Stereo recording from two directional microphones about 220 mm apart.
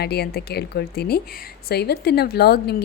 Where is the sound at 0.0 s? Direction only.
45° left (ahead or behind).